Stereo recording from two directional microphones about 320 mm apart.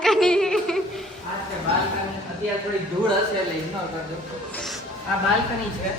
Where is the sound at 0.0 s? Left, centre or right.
Centre.